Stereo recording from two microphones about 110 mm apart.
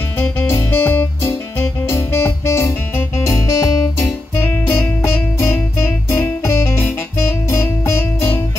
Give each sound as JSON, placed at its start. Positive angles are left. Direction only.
{"t": 0.2, "sound": "music", "side_deg": 20}